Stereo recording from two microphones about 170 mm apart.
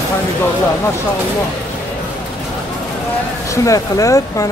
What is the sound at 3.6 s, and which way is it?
Speech, 20° left (ahead or behind).